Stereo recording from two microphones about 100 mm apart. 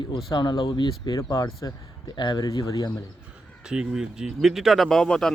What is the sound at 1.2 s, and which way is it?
Speech, 35° left (ahead or behind).